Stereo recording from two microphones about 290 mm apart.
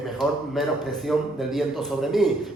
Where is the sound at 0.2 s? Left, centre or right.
Centre.